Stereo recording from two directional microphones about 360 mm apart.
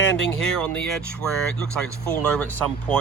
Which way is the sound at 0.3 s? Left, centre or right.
Centre.